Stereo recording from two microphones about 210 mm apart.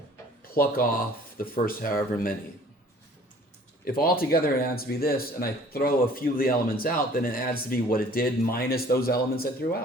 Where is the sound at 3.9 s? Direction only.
45° left (ahead or behind).